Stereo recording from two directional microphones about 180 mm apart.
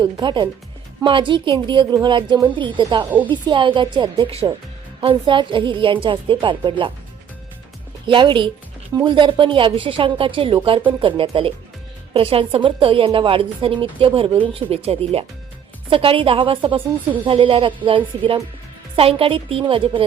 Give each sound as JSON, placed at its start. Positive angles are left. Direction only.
{"t": 0.0, "sound": "a woman's voice", "side_deg": -25}
{"t": 8.0, "sound": "a woman's voice", "side_deg": -30}